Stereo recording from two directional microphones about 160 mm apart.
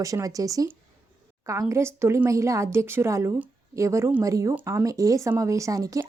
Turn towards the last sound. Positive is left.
turn(degrees=-20)  # may be behind; listen again after turning